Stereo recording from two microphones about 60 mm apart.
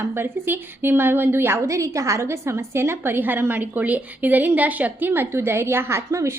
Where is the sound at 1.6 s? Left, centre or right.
Right.